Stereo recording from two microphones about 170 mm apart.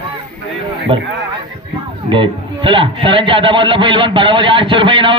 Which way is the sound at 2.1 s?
30° right (ahead or behind).